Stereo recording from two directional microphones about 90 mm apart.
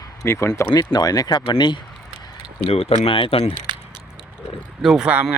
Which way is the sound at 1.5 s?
60° left (ahead or behind).